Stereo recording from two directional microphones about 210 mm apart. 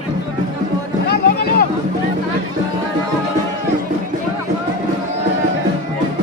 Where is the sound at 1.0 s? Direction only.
45° left (ahead or behind).